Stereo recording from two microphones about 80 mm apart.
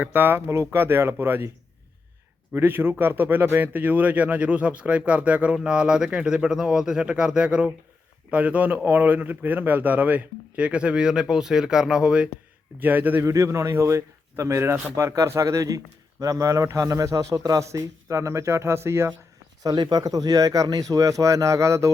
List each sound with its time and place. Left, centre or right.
0.0 s a man's voice: right
2.5 s a man's voice: right
12.8 s a man's voice: right
13.2 s a man's voice: right
19.6 s speech: right